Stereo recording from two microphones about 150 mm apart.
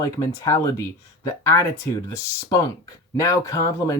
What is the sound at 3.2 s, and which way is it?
Speech, 20° left (ahead or behind).